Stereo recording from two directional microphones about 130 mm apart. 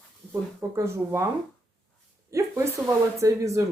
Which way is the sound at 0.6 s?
20° right (ahead or behind).